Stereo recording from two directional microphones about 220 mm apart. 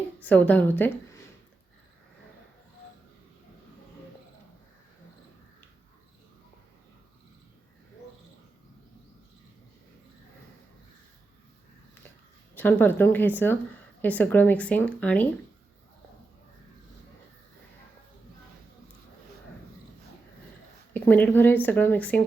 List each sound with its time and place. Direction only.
0.2 s a woman's voice: 5° left (ahead or behind)
12.5 s speech: 10° left (ahead or behind)
20.9 s speech: 5° left (ahead or behind)